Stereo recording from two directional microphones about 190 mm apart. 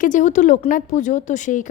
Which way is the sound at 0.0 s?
40° left (ahead or behind).